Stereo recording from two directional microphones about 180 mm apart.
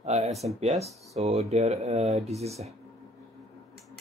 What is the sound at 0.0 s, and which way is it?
Speech, 35° right (ahead or behind).